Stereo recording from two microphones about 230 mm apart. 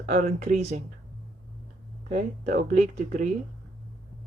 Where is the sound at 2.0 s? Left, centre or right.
Right.